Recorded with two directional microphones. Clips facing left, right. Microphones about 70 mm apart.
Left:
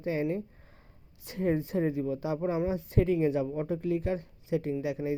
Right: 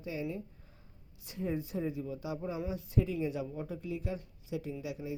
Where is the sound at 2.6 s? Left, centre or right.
Left.